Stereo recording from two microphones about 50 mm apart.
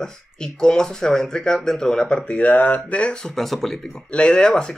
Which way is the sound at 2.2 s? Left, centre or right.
Left.